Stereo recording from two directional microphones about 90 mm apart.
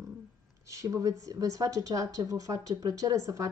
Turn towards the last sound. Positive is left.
turn(degrees=-40)  # may be behind; listen again after turning